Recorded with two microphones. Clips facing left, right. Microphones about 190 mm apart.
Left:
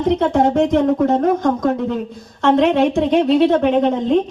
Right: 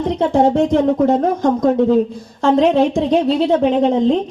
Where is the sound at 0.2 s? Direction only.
30° right (ahead or behind).